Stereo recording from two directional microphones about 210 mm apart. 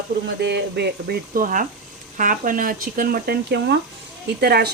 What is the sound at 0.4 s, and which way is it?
Speech, 55° right (ahead or behind).